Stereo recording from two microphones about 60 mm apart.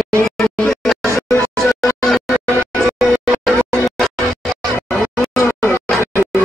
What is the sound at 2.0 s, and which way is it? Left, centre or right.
Music, centre.